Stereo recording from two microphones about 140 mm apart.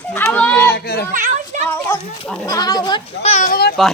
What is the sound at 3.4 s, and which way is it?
Speech, 90° left.